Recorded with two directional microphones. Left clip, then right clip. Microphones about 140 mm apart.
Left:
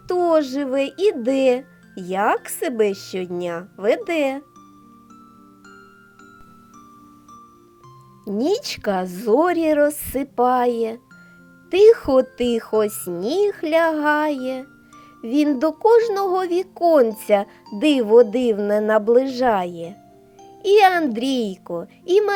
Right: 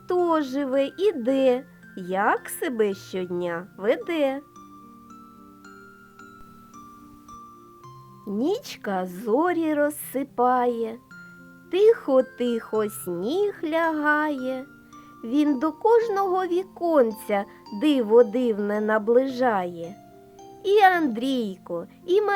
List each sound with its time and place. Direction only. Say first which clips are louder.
0.1 s speech: left 5 dB; 10° left (ahead or behind)
8.3 s a woman's voice: left 5 dB; 25° left (ahead or behind)